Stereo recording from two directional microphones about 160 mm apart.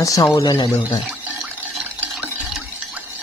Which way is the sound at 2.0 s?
10° right (ahead or behind).